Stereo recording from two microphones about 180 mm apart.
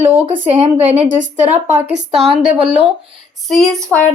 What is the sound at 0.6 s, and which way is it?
A woman's voice, 40° right (ahead or behind).